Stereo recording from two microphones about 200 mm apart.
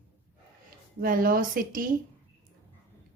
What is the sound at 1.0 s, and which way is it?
Speech, 45° right (ahead or behind).